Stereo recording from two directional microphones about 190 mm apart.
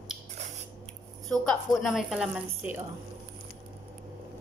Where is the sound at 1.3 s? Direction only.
Centre (ahead or behind).